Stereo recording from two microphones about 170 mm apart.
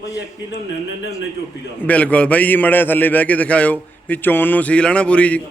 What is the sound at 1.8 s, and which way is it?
A man's voice, 10° left (ahead or behind).